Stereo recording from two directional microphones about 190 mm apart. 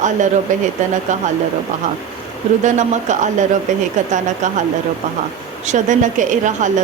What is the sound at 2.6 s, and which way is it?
Speech, 40° right (ahead or behind).